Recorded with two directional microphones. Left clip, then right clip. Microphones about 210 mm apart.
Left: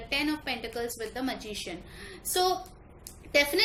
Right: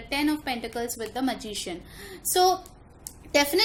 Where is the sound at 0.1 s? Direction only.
50° right (ahead or behind).